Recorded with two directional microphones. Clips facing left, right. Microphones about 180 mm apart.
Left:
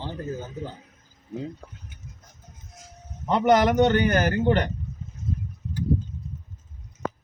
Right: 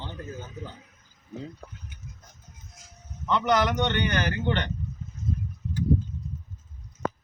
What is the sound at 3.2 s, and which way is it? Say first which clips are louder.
A man's voice: left 5 dB; 40° left (ahead or behind).